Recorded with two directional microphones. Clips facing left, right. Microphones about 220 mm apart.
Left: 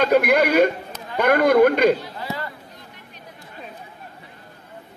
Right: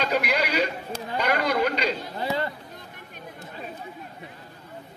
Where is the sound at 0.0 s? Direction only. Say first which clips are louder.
Left 8 dB; 50° left (ahead or behind).